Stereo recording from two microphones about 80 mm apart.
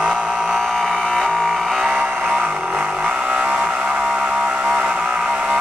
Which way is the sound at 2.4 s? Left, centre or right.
Centre.